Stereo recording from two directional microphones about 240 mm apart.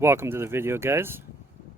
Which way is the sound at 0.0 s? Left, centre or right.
Centre.